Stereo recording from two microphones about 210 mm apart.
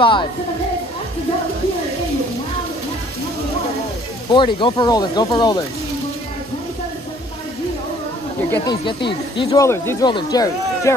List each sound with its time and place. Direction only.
0.0 s speech: 25° left (ahead or behind)
4.3 s speech: 25° left (ahead or behind)
8.5 s speech: 20° left (ahead or behind)